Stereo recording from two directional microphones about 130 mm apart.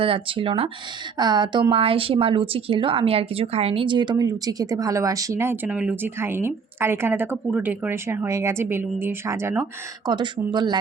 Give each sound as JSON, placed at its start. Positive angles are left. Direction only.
{"t": 0.0, "sound": "a woman's voice", "side_deg": -45}
{"t": 10.1, "sound": "speech", "side_deg": -35}